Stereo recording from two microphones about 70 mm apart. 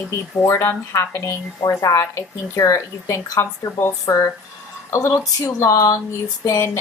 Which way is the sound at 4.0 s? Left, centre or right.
Left.